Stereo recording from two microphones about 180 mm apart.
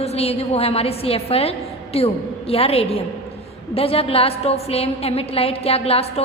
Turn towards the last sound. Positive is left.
turn(degrees=35)  # may be behind; listen again after turning